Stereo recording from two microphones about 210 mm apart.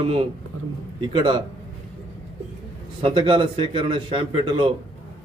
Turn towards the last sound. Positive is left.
turn(degrees=-25)  # may be behind; listen again after turning